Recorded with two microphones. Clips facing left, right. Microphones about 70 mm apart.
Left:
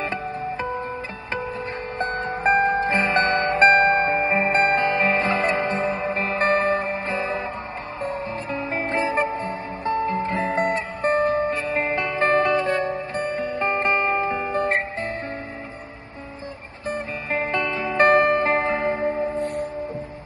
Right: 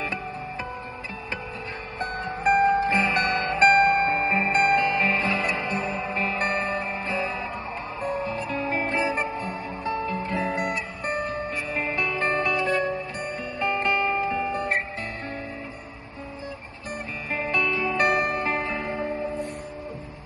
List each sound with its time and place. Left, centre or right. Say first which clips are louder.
2.0 s music: left 4 dB; left
16.9 s music: left 4 dB; left